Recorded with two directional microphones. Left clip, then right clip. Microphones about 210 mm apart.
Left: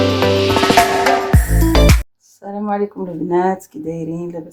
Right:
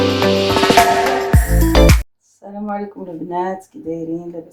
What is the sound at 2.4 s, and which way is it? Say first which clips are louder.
Speech: left 5 dB; 35° left (ahead or behind).